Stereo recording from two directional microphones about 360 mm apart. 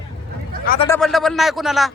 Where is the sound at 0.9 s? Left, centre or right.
Centre.